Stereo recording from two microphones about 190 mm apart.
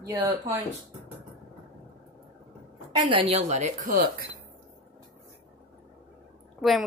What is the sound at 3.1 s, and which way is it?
Speech, 35° right (ahead or behind).